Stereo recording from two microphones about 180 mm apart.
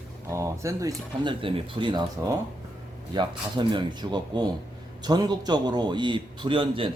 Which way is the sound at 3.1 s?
25° right (ahead or behind).